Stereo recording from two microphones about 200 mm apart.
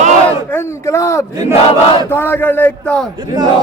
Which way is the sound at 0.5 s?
15° left (ahead or behind).